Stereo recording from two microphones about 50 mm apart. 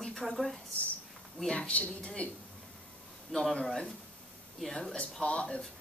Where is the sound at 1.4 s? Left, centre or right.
Left.